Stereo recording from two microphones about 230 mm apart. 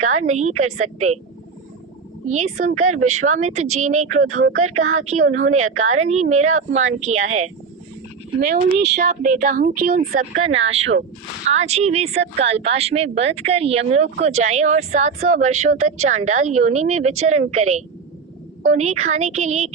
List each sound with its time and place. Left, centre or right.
0.0 s speech: right
2.2 s speech: right
8.4 s speech: right
10.5 s speech: right